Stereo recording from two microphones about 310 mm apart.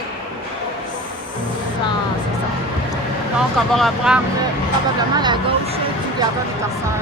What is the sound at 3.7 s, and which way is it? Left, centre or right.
Speech, centre.